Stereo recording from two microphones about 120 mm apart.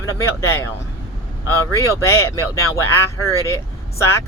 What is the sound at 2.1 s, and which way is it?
Speech, 20° left (ahead or behind).